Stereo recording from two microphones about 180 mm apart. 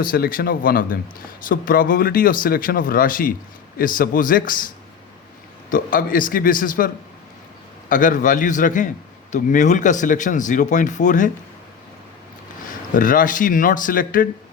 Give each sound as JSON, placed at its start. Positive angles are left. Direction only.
{"t": 0.0, "sound": "speech", "side_deg": 55}
{"t": 5.7, "sound": "speech", "side_deg": 50}
{"t": 12.9, "sound": "speech", "side_deg": 50}